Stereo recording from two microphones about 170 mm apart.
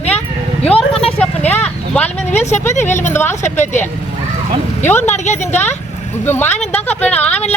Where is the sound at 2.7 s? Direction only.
45° left (ahead or behind).